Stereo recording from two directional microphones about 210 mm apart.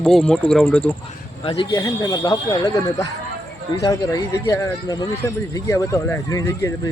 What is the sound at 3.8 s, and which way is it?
Speech, 15° left (ahead or behind).